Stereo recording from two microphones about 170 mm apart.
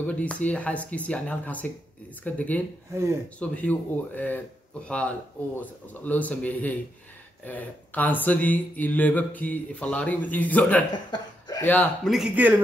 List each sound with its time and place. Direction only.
0.0 s mantra: 10° left (ahead or behind)
11.1 s cough: 25° left (ahead or behind)
11.6 s mantra: 10° left (ahead or behind)
12.1 s speech: 5° right (ahead or behind)